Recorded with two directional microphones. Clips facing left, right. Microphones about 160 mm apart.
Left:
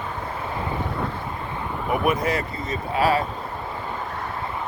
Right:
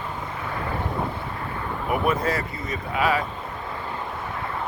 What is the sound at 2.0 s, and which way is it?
Speech, 15° left (ahead or behind).